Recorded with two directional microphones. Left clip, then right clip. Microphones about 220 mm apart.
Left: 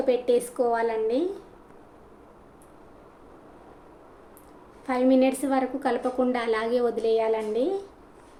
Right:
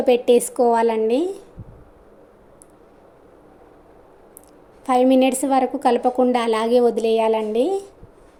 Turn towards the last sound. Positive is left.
turn(degrees=-30)  # may be behind; listen again after turning